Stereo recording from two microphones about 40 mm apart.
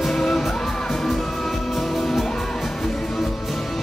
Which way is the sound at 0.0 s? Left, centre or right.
Centre.